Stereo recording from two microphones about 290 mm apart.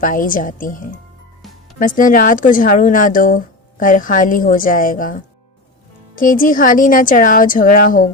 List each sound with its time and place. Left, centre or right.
0.0 s speech: left